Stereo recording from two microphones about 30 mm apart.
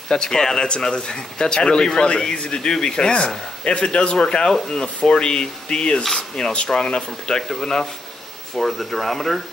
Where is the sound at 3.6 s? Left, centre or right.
Left.